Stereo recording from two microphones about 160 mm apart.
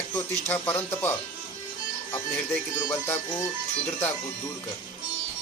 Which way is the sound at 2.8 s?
15° left (ahead or behind).